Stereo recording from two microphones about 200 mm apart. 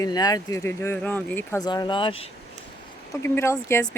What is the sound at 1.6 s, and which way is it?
Speech, 20° left (ahead or behind).